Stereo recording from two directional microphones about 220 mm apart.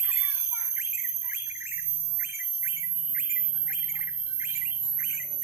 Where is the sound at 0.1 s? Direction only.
10° right (ahead or behind).